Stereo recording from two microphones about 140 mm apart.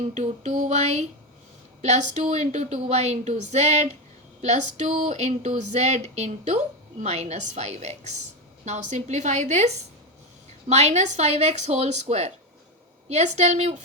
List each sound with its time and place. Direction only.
0.0 s a woman's voice: 55° right (ahead or behind)